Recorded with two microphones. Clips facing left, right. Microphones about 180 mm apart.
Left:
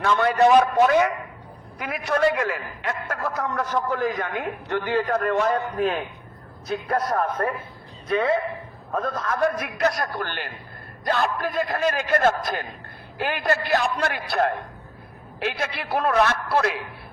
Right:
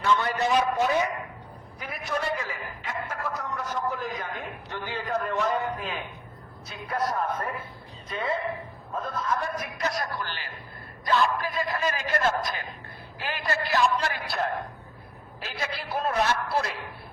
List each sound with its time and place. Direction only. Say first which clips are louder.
0.0 s a man's voice: left 6 dB; 65° left (ahead or behind); by 1.1 s 80° left
2.0 s a man's voice: left 9 dB; 70° left (ahead or behind)
6.7 s a man's voice: left 5 dB; 55° left (ahead or behind)
11.0 s a man's voice: left 1 dB; 45° left (ahead or behind); by 16.7 s 65° left (ahead or behind)